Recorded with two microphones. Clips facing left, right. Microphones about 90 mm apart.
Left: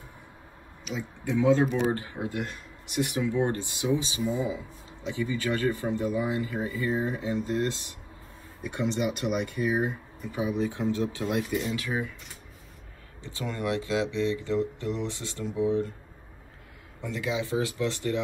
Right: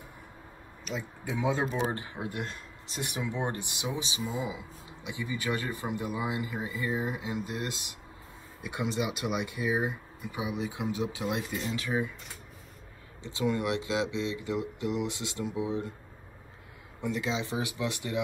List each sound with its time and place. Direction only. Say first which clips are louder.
0.8 s speech: left 3 dB; centre (ahead or behind)
1.4 s speech: left 6 dB; 15° right (ahead or behind)
2.9 s speech: left 7 dB; 25° right (ahead or behind)
13.2 s speech: right 3 dB; 20° right (ahead or behind)
17.0 s speech: left 1 dB; 20° right (ahead or behind)